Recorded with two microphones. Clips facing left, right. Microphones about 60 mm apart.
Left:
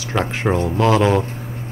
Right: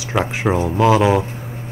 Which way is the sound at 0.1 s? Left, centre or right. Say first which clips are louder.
Right 1 dB; centre.